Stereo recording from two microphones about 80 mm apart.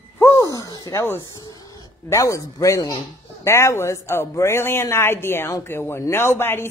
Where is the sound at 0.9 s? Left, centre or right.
Left.